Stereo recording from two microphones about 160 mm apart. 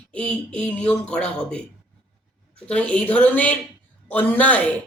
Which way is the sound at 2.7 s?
5° left (ahead or behind).